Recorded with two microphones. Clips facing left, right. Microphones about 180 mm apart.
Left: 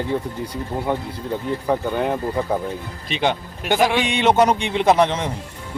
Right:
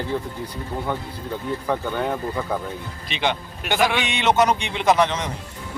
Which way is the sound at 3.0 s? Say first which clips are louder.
Left 3 dB; 40° left (ahead or behind).